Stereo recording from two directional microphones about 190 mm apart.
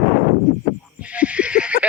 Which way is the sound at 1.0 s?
5° right (ahead or behind).